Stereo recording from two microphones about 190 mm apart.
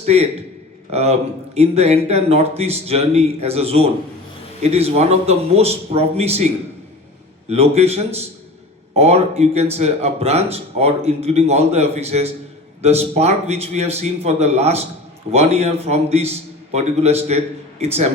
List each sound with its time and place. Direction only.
0.0 s a man's voice: 35° right (ahead or behind)